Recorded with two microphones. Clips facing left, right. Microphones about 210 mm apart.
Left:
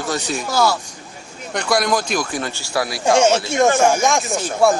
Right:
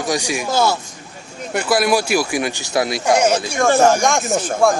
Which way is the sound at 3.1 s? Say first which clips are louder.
Left 3 dB; 25° left (ahead or behind).